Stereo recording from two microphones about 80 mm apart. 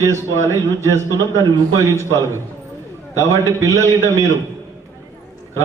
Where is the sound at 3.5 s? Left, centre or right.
Right.